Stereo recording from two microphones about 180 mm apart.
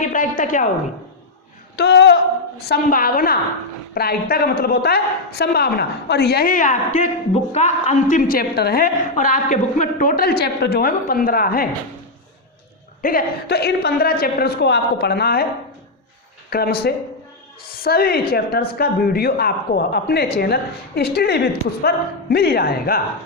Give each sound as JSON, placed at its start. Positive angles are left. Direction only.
{"t": 0.0, "sound": "speech", "side_deg": 45}
{"t": 1.7, "sound": "a sound", "side_deg": 70}
{"t": 2.6, "sound": "a woman's voice", "side_deg": 55}
{"t": 13.0, "sound": "speech", "side_deg": 50}
{"t": 16.5, "sound": "speech", "side_deg": 60}